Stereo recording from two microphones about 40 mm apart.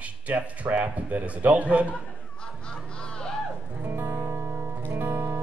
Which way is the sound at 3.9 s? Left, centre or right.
Right.